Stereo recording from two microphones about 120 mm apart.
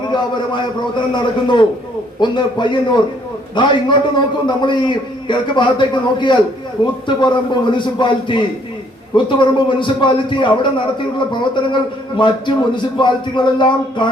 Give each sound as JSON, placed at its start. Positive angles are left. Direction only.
{"t": 0.1, "sound": "a man's voice", "side_deg": 40}